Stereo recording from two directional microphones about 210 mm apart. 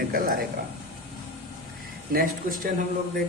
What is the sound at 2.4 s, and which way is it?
Speech, 40° right (ahead or behind).